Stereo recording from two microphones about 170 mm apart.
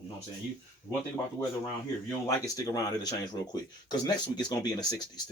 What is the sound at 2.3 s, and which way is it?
Speech, 20° left (ahead or behind).